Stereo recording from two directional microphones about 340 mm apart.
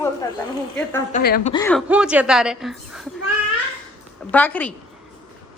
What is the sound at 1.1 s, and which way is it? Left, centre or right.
Speech, left.